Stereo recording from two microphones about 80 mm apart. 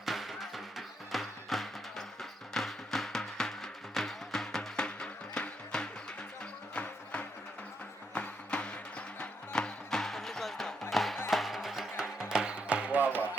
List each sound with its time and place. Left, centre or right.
0.0 s music: centre